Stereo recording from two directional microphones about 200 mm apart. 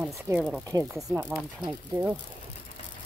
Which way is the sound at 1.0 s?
5° right (ahead or behind).